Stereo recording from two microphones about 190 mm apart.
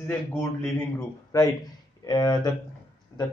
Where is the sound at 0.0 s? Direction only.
10° left (ahead or behind).